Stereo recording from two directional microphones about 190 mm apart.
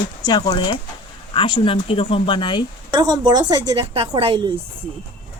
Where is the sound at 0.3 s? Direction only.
20° left (ahead or behind).